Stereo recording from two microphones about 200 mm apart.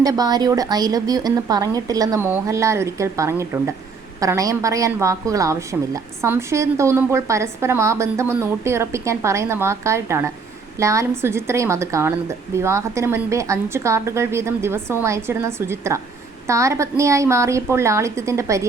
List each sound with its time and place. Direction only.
0.0 s a woman's voice: 20° right (ahead or behind)